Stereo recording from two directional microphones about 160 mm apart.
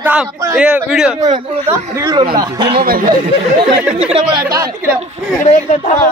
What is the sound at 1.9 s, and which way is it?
Speech, 25° right (ahead or behind).